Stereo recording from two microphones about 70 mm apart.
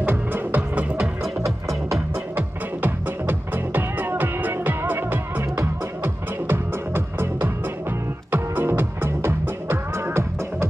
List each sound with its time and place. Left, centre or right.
0.0 s music: right
1.4 s music: right
2.3 s music: right